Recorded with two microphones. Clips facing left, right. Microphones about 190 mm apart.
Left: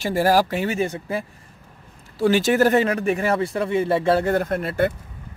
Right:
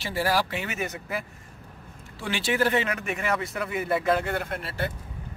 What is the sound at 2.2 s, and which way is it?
Speech, 45° left (ahead or behind).